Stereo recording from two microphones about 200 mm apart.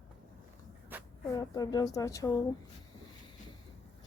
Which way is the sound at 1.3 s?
15° left (ahead or behind).